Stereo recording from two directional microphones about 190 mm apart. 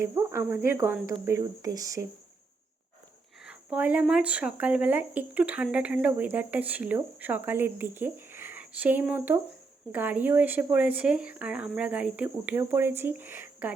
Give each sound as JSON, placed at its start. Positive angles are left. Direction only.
{"t": 0.0, "sound": "speech", "side_deg": -15}
{"t": 3.4, "sound": "speech", "side_deg": -5}